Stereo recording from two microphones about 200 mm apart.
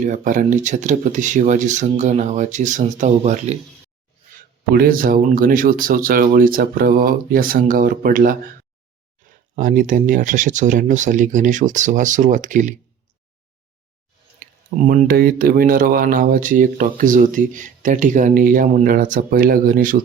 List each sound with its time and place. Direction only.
0.0 s speech: 40° right (ahead or behind)
4.7 s speech: 45° right (ahead or behind)
9.2 s a sound: 40° right (ahead or behind)
9.6 s speech: 40° right (ahead or behind)
14.3 s speech: 40° right (ahead or behind)